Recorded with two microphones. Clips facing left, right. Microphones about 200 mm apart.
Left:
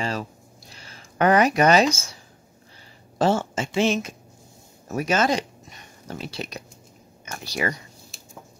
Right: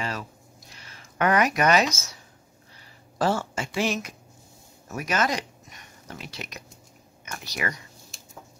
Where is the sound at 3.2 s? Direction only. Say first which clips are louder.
Left 4 dB; 25° left (ahead or behind).